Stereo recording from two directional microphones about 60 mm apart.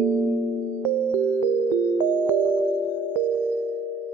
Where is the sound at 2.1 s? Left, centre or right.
Right.